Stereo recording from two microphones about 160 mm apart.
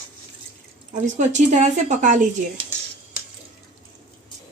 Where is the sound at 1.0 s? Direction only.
45° right (ahead or behind).